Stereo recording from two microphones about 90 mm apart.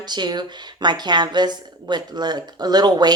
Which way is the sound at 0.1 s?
50° right (ahead or behind).